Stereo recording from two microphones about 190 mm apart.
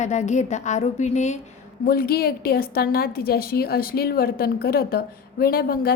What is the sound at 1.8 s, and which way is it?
A woman's voice, 50° left (ahead or behind).